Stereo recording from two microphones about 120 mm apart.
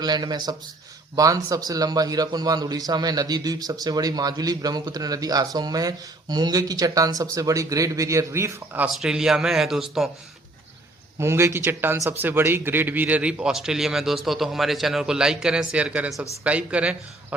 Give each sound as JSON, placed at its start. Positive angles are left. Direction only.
{"t": 0.0, "sound": "a man's voice", "side_deg": -35}
{"t": 8.9, "sound": "speech", "side_deg": -5}
{"t": 11.2, "sound": "a man's voice", "side_deg": -20}